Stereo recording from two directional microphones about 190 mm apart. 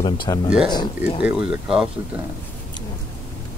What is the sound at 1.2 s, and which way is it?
Speech, 5° right (ahead or behind).